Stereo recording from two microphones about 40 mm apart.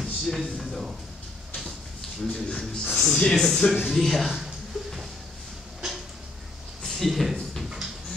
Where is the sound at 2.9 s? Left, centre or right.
Centre.